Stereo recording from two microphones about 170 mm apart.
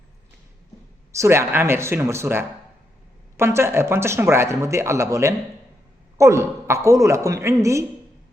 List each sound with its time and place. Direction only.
1.1 s speech: 15° right (ahead or behind)